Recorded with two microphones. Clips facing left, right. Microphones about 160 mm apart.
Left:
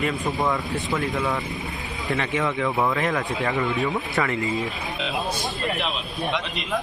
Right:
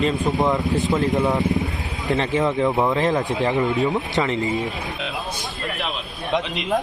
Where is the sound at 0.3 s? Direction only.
20° right (ahead or behind).